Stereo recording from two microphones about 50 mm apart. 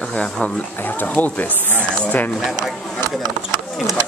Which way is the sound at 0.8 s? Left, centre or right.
Left.